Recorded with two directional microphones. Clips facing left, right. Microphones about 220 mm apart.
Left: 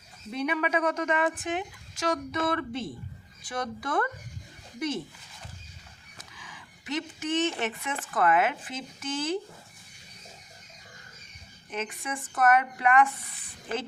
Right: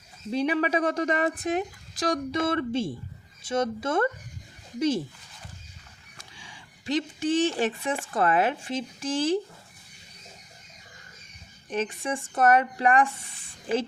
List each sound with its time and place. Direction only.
0.3 s speech: 30° right (ahead or behind)
6.1 s a sound: 30° right (ahead or behind)
8.0 s speech: 30° right (ahead or behind)
11.7 s speech: 30° right (ahead or behind)